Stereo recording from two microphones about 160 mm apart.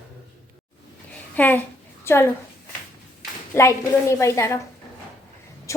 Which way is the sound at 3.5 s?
20° left (ahead or behind).